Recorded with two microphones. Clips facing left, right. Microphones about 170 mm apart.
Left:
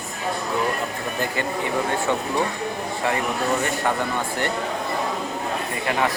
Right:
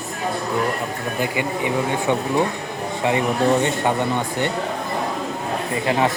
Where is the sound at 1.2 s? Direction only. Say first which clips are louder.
Right 2 dB; 15° right (ahead or behind).